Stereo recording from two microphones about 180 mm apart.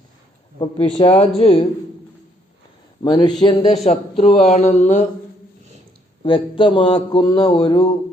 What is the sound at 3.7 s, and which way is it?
Speech, 35° left (ahead or behind).